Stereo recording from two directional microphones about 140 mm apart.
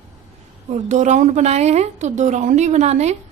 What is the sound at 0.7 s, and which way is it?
A woman's voice, 60° right (ahead or behind).